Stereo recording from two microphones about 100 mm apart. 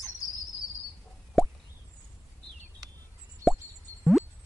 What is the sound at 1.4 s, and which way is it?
Plop, centre (ahead or behind).